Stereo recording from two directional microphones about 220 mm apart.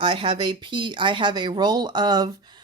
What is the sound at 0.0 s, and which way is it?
Speech, 25° right (ahead or behind).